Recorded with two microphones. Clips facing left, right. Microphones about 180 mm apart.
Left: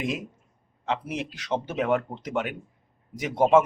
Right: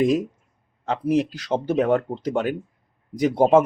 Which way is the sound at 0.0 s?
40° right (ahead or behind).